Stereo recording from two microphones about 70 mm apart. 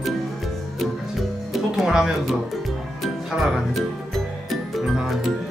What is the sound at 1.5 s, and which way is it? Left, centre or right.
Music, centre.